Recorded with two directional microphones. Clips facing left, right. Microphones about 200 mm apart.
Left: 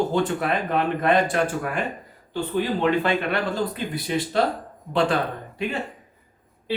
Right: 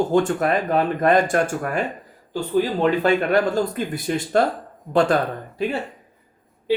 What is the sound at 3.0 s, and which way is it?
Speech, 45° right (ahead or behind).